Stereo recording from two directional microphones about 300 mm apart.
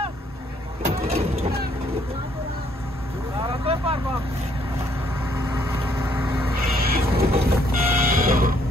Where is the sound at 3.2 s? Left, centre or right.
Centre.